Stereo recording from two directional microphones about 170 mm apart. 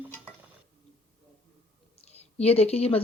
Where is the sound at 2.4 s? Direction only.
35° left (ahead or behind).